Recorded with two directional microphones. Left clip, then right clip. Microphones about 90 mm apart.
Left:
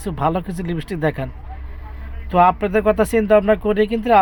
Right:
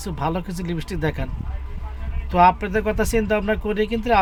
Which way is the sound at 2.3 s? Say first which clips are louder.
Left 2 dB; 30° left (ahead or behind).